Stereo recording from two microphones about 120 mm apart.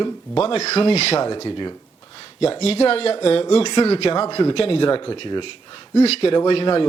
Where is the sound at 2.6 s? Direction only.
55° left (ahead or behind).